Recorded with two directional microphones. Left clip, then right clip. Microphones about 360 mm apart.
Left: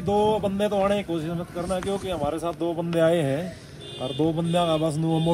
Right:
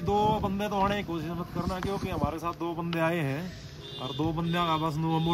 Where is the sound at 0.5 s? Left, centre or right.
Centre.